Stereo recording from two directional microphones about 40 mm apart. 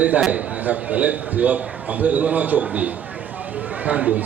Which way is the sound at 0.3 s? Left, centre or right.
Right.